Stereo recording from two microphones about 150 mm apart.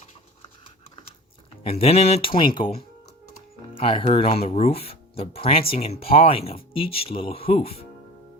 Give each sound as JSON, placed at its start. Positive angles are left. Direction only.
{"t": 1.6, "sound": "speech", "side_deg": 45}
{"t": 3.8, "sound": "speech", "side_deg": 35}